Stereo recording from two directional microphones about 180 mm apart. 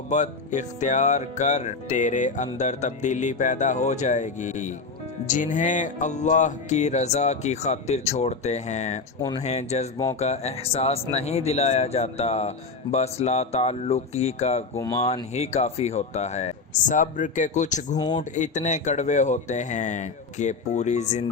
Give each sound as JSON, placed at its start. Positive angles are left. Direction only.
{"t": 0.1, "sound": "music", "side_deg": 40}
{"t": 14.8, "sound": "speech", "side_deg": 20}
{"t": 15.0, "sound": "music", "side_deg": 35}
{"t": 17.9, "sound": "speech", "side_deg": 20}
{"t": 18.2, "sound": "music", "side_deg": 40}